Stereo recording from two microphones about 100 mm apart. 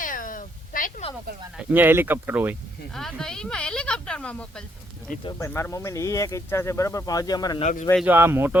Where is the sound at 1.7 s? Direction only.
20° right (ahead or behind).